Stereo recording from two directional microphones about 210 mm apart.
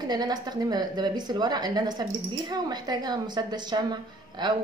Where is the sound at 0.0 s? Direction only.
20° right (ahead or behind).